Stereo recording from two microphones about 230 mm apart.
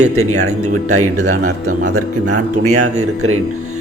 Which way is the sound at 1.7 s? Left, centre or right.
Right.